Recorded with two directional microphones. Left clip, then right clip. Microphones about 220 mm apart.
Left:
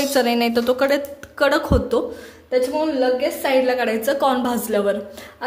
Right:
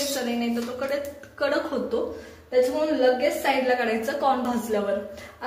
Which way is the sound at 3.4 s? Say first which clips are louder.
Left 5 dB; 50° left (ahead or behind).